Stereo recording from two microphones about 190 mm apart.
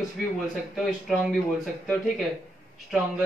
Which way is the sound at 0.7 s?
Centre (ahead or behind).